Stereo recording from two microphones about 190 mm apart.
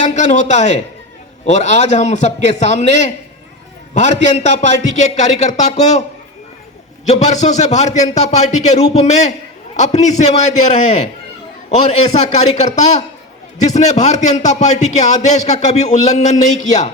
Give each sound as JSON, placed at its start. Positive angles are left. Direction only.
{"t": 0.0, "sound": "a man's voice", "side_deg": 40}
{"t": 4.9, "sound": "a man's voice", "side_deg": 35}
{"t": 7.1, "sound": "a man's voice", "side_deg": 35}